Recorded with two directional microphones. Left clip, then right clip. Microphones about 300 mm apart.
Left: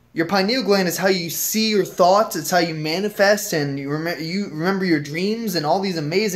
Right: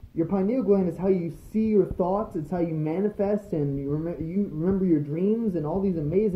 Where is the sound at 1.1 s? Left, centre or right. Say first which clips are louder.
Left 6 dB; left.